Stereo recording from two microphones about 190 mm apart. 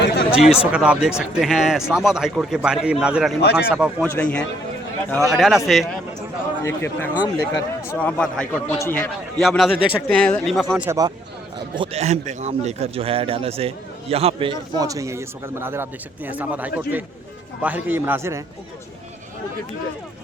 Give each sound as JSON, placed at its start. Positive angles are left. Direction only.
{"t": 0.0, "sound": "a sound", "side_deg": 65}
{"t": 0.3, "sound": "a man's voice", "side_deg": -5}
{"t": 4.0, "sound": "a man's voice", "side_deg": 5}
{"t": 6.7, "sound": "speech", "side_deg": 10}
{"t": 9.4, "sound": "a man's voice", "side_deg": 0}
{"t": 10.8, "sound": "a man's voice", "side_deg": -20}
{"t": 11.8, "sound": "a man's voice", "side_deg": -35}